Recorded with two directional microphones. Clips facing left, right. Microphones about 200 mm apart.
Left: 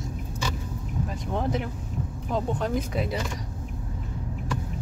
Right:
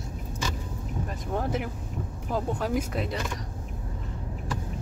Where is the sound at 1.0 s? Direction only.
5° right (ahead or behind).